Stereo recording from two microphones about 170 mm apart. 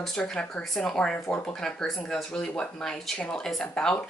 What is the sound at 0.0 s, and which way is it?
Speech, 5° left (ahead or behind).